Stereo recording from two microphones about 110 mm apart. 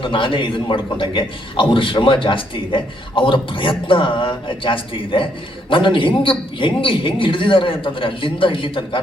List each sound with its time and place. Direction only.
0.0 s a man's voice: 50° left (ahead or behind)